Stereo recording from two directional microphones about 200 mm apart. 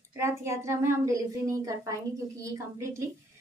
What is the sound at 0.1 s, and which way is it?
A woman's voice, 15° right (ahead or behind).